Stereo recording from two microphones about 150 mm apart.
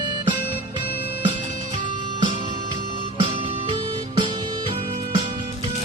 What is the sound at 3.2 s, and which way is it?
Music, 40° right (ahead or behind).